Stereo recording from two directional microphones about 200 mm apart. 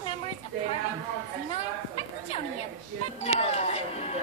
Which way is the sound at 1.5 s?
30° left (ahead or behind).